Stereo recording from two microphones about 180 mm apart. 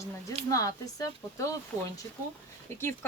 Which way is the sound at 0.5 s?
20° left (ahead or behind).